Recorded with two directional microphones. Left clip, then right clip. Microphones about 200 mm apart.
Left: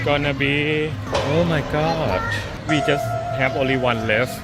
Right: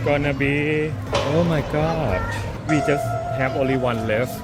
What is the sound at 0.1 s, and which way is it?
A man's voice, centre (ahead or behind).